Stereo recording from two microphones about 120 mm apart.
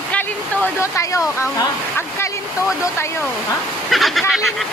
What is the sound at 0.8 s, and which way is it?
Speech, 25° left (ahead or behind).